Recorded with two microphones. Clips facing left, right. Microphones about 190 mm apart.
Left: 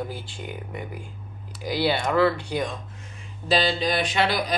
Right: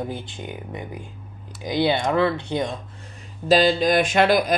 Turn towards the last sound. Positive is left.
turn(degrees=-50)  # may be behind; listen again after turning